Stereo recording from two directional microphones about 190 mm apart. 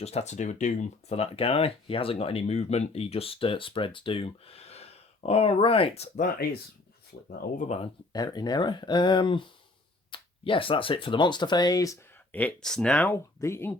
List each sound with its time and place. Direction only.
0.0 s speech: 35° left (ahead or behind)
8.1 s speech: 20° left (ahead or behind)